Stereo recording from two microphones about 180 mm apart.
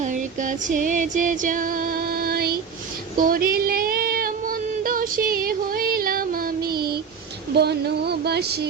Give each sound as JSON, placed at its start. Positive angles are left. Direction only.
{"t": 0.0, "sound": "music", "side_deg": -45}
{"t": 3.2, "sound": "female singing", "side_deg": -55}
{"t": 7.5, "sound": "a sound", "side_deg": -65}